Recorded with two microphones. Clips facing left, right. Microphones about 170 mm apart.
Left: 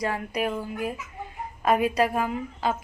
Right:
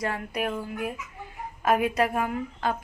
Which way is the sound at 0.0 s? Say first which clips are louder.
Left 2 dB; centre (ahead or behind).